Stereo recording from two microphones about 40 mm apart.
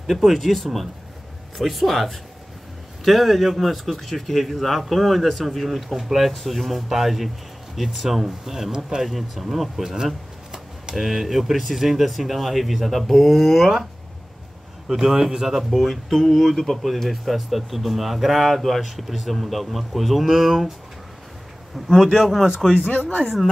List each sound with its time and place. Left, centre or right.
0.0 s speech: centre
14.9 s speech: centre
21.7 s speech: centre
22.8 s speech: left